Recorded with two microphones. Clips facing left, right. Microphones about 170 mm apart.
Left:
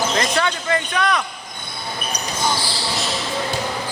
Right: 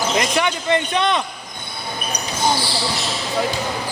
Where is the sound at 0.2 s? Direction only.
15° right (ahead or behind).